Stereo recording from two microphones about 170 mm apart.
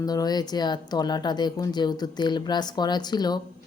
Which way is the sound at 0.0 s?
20° left (ahead or behind).